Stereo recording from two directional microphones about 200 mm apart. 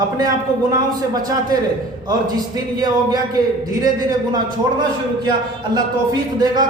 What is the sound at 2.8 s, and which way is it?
Speech, 20° right (ahead or behind).